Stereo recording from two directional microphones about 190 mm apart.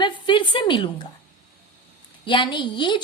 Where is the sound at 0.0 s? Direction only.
25° left (ahead or behind).